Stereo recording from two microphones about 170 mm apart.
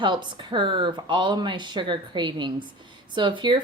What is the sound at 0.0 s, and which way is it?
A woman's voice, 30° right (ahead or behind).